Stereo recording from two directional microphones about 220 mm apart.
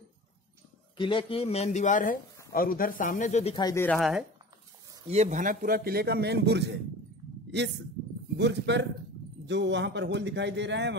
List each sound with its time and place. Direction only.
0.9 s speech: 20° left (ahead or behind)
3.5 s speech: 15° left (ahead or behind); by 4.3 s centre (ahead or behind)
5.0 s a man's voice: 30° right (ahead or behind); by 6.8 s 50° right (ahead or behind)
8.4 s a man's voice: 50° right (ahead or behind)